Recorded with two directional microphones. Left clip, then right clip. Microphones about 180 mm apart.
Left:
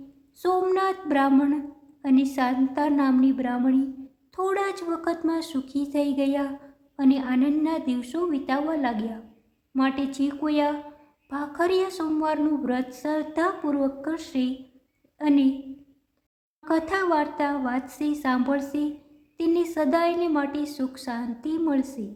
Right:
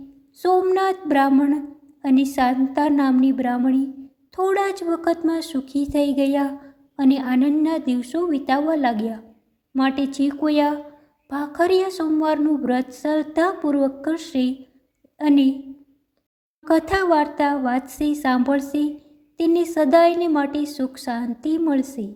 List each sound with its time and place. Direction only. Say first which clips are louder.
0.3 s a woman's voice: right 5 dB; 20° right (ahead or behind)
16.6 s a woman's voice: right 6 dB; 25° right (ahead or behind)